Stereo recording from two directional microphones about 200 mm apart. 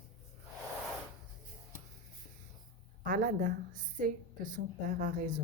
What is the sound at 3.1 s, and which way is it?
Speech, 40° right (ahead or behind).